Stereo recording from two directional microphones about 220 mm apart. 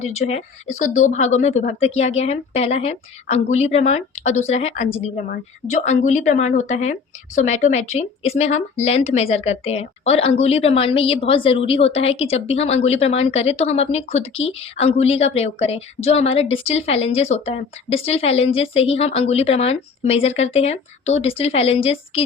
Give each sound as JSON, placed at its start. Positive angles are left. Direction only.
{"t": 0.0, "sound": "a woman's voice", "side_deg": 30}